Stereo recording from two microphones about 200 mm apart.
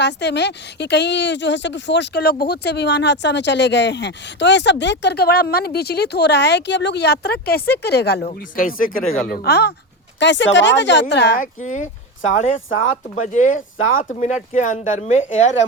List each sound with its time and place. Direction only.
0.0 s speech: 60° left (ahead or behind)
8.3 s speech: 45° left (ahead or behind); by 11.3 s 60° left (ahead or behind)
11.3 s speech: 40° left (ahead or behind)
13.7 s speech: 80° left
14.0 s speech: 35° left (ahead or behind)